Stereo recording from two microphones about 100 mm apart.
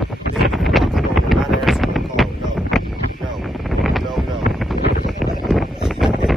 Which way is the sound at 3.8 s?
Centre (ahead or behind).